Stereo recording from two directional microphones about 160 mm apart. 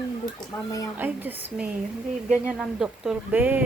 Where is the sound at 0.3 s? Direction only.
20° left (ahead or behind).